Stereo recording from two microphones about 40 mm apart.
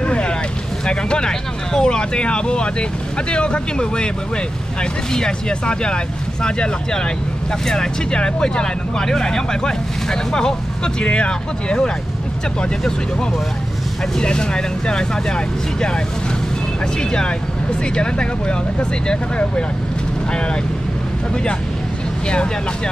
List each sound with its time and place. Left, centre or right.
0.0 s boat: left
0.8 s speech: centre
5.1 s speech: centre
14.1 s speech: left
17.9 s speech: left